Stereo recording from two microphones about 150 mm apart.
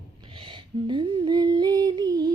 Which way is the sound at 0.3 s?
35° right (ahead or behind).